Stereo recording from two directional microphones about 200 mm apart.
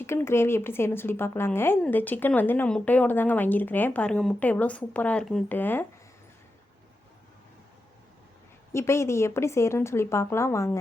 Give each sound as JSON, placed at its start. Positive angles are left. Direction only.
{"t": 0.0, "sound": "speech", "side_deg": 10}
{"t": 8.7, "sound": "speech", "side_deg": 15}